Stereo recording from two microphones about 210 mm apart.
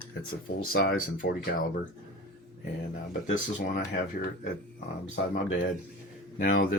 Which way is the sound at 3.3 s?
40° left (ahead or behind).